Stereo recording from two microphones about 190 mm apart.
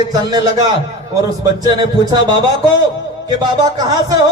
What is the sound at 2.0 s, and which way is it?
Speech, 20° right (ahead or behind).